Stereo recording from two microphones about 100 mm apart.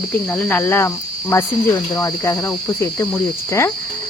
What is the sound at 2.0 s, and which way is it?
Cricket, 30° left (ahead or behind).